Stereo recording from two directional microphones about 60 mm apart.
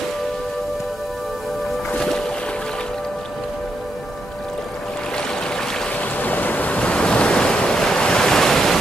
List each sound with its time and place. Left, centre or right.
5.9 s waves: left; by 8.7 s centre